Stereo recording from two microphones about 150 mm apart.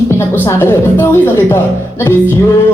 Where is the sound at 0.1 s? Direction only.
15° left (ahead or behind).